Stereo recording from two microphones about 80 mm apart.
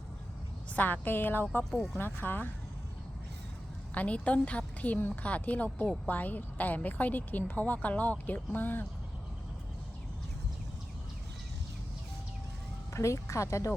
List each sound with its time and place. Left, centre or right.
0.7 s a woman's voice: left
1.7 s speech: centre
2.0 s a woman's voice: left
3.9 s a woman's voice: centre
12.9 s speech: left